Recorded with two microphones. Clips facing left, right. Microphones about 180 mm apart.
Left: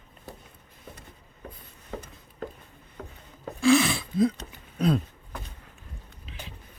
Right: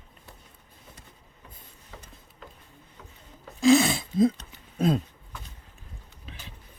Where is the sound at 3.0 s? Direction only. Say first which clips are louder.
Left 10 dB; 55° left (ahead or behind).